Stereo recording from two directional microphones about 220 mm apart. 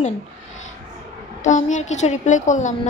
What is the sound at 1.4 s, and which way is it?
A woman's voice, 35° left (ahead or behind).